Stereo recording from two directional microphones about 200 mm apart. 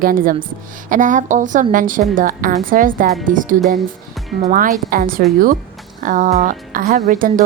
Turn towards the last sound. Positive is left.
turn(degrees=-40)  # may be behind; listen again after turning